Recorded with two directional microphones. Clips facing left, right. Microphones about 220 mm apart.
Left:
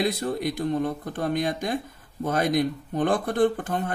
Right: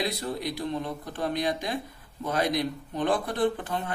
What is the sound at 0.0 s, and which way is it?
Speech, 50° left (ahead or behind).